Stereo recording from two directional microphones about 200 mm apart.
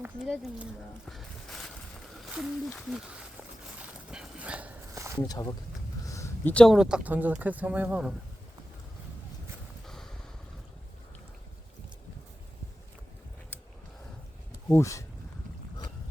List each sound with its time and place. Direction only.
0.0 s speech: 5° right (ahead or behind)
4.1 s dog: 5° right (ahead or behind)
5.2 s speech: 20° left (ahead or behind); by 8.1 s 5° right (ahead or behind)
9.8 s wind noise: centre (ahead or behind)
14.7 s speech: 15° left (ahead or behind)